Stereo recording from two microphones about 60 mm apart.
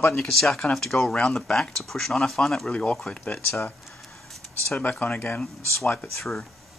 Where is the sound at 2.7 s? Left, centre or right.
Centre.